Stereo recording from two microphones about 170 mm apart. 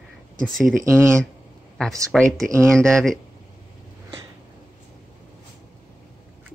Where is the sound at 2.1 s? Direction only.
5° left (ahead or behind).